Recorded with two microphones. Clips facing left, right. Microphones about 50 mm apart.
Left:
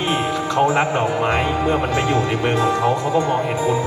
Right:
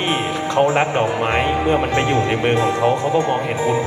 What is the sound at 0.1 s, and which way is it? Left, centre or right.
Music, right.